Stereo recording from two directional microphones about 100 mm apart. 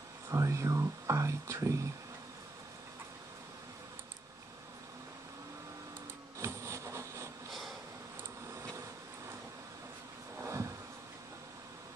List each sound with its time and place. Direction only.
0.3 s speech: 30° right (ahead or behind)
6.4 s vehicle: 30° right (ahead or behind)
10.4 s a sound: 30° right (ahead or behind)